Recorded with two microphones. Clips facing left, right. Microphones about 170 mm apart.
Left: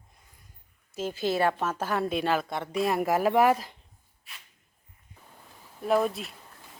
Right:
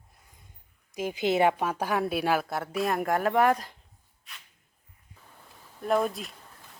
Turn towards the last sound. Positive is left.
turn(degrees=0)  # may be behind; listen again after turning